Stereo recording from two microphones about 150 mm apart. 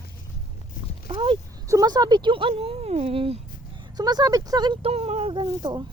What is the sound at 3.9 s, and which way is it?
Speech, 25° right (ahead or behind).